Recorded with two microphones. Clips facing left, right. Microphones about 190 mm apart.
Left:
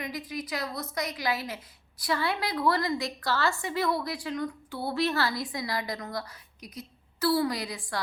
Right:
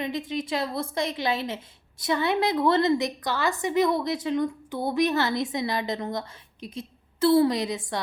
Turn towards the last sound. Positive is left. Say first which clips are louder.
# right 6 dB
turn(degrees=-20)  # may be behind; listen again after turning